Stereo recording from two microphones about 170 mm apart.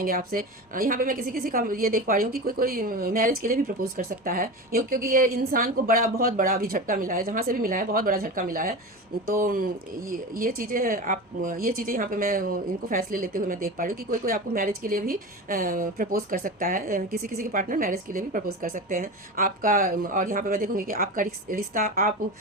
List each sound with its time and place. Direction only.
0.0 s speech: 55° right (ahead or behind)